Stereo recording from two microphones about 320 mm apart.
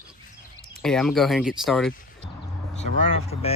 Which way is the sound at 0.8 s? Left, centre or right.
Centre.